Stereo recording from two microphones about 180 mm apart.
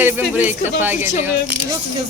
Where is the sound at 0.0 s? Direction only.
10° right (ahead or behind).